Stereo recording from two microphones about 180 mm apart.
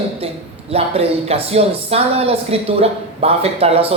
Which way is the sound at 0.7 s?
35° right (ahead or behind).